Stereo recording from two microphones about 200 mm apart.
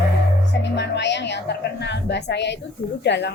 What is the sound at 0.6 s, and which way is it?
Speech, 60° left (ahead or behind).